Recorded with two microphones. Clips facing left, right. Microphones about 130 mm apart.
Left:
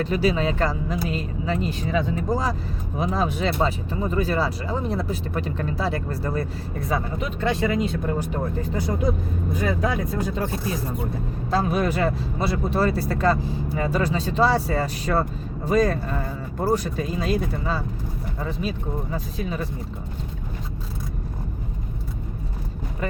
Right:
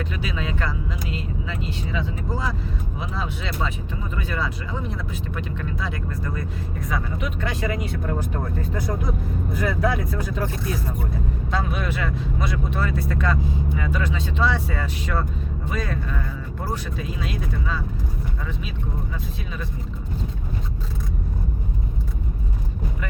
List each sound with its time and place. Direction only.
0.0 s speech: 35° left (ahead or behind)
9.6 s speech: 20° left (ahead or behind)
11.5 s speech: 40° left (ahead or behind)
19.1 s speech: 40° left (ahead or behind)